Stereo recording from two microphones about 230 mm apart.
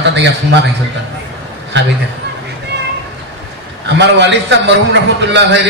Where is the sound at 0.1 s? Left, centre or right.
Right.